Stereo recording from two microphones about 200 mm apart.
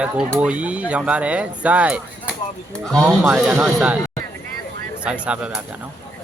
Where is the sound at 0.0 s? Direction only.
5° right (ahead or behind).